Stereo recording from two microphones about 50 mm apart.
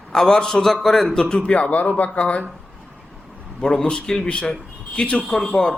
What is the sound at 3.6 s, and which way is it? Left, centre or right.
A man's voice, centre.